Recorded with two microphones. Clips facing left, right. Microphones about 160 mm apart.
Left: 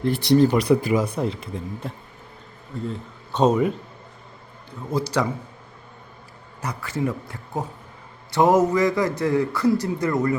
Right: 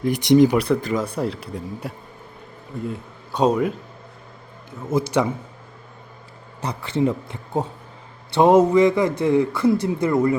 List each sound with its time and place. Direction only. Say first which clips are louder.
0.0 s speech: right 3 dB; 15° right (ahead or behind)
0.5 s speech: left 1 dB; 5° left (ahead or behind)
1.2 s a man's voice: right 1 dB; 5° right (ahead or behind)
4.9 s speech: right 3 dB; 20° right (ahead or behind)
6.6 s speech: right 5 dB; 30° right (ahead or behind)